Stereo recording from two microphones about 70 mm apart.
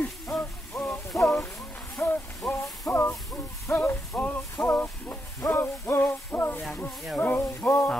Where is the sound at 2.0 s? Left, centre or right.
Left.